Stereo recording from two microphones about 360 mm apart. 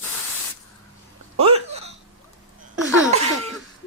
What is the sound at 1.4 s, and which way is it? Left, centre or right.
Hiccup, centre.